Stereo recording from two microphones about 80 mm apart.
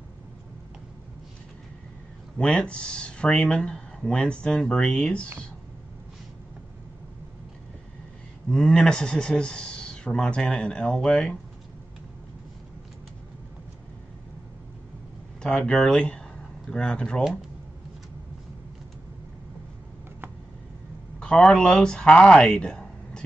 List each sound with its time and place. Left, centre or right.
2.3 s speech: centre
8.5 s speech: centre
15.4 s speech: centre
21.2 s speech: centre